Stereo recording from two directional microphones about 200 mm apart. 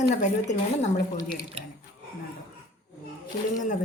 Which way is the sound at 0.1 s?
35° left (ahead or behind).